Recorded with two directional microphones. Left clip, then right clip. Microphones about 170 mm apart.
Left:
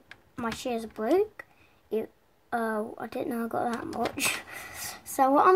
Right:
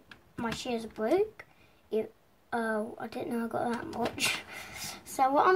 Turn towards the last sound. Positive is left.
turn(degrees=40)  # may be behind; listen again after turning